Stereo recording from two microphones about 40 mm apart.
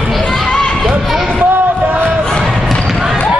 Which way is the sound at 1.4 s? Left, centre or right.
Right.